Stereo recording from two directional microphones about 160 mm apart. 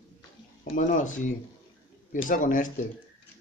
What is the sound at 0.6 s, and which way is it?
Speech, 60° left (ahead or behind).